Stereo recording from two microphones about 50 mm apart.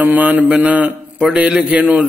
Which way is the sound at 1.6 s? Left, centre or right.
Right.